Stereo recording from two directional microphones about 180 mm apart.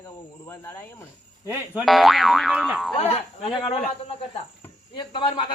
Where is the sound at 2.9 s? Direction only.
35° left (ahead or behind).